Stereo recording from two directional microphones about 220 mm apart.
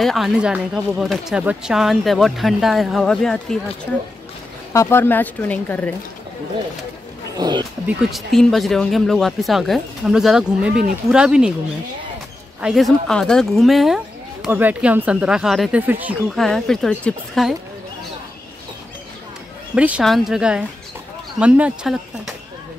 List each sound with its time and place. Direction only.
0.0 s speech: centre (ahead or behind)
7.3 s speech: 20° right (ahead or behind)
7.8 s speech: centre (ahead or behind)
12.6 s speech: centre (ahead or behind)
19.7 s speech: 5° right (ahead or behind)